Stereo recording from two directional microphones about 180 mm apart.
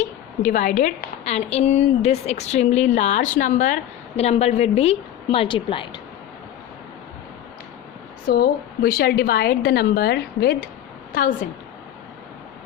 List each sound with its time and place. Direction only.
0.0 s a woman's voice: 45° left (ahead or behind); by 6.0 s 30° left (ahead or behind)
8.3 s a woman's voice: 60° left (ahead or behind)
11.1 s a woman's voice: 50° left (ahead or behind)